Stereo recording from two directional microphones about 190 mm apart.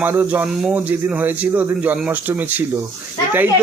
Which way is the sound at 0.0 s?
10° right (ahead or behind).